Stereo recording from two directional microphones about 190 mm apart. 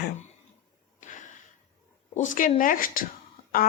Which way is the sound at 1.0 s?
40° left (ahead or behind).